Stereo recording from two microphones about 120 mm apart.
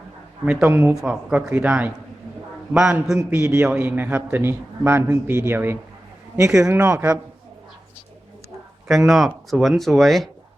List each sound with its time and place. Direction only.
0.4 s a man's voice: 10° right (ahead or behind)
3.2 s a man's voice: 20° right (ahead or behind)
8.9 s speech: centre (ahead or behind)